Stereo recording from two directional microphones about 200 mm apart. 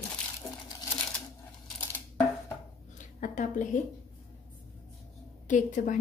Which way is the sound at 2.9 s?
40° left (ahead or behind).